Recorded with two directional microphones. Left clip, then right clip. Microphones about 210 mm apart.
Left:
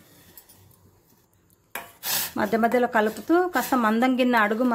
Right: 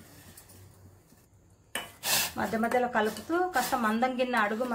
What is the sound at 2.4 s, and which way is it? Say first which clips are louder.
Speech: left 10 dB; 50° left (ahead or behind).